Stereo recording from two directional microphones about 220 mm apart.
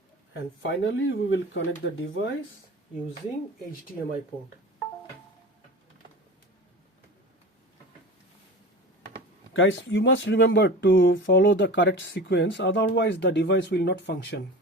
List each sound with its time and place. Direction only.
0.6 s speech: 55° left (ahead or behind)
9.5 s speech: 60° left (ahead or behind)